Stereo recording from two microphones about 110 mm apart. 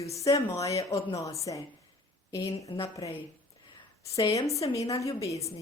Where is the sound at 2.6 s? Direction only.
30° left (ahead or behind).